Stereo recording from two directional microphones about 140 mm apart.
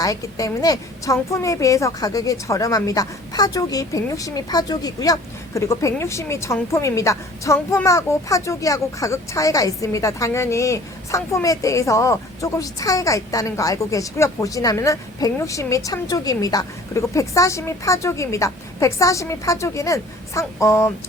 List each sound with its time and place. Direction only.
0.0 s a woman's voice: 25° left (ahead or behind)